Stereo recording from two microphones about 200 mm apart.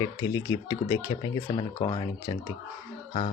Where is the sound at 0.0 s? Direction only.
20° left (ahead or behind).